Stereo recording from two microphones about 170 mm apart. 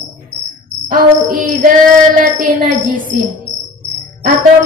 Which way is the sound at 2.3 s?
55° right (ahead or behind).